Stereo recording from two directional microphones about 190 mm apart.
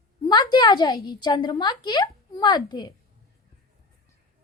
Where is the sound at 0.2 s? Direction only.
20° left (ahead or behind).